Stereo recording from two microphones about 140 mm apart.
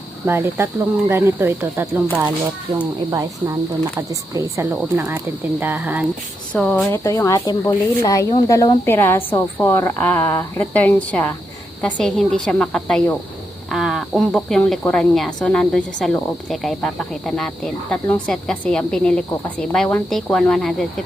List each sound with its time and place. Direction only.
0.3 s speech: 15° right (ahead or behind)
4.1 s speech: 20° right (ahead or behind)
6.5 s a woman's voice: 10° left (ahead or behind)
6.7 s speech: 20° left (ahead or behind); by 20.8 s 5° left (ahead or behind)